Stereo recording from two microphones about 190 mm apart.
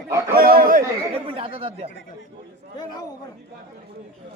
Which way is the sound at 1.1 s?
30° right (ahead or behind).